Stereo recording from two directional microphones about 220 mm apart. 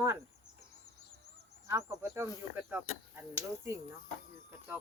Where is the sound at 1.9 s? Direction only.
15° right (ahead or behind).